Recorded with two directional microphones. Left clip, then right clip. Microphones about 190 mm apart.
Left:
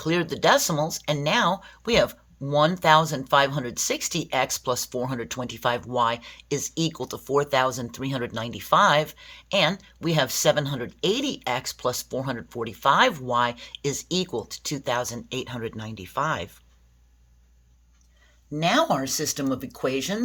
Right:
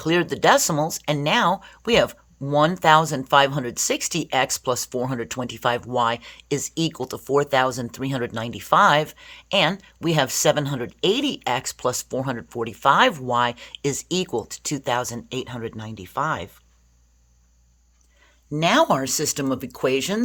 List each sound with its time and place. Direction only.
0.0 s speech: 30° right (ahead or behind)
18.5 s speech: 55° right (ahead or behind)